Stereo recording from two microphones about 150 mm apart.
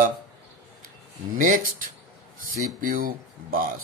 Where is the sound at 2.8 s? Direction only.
70° right (ahead or behind).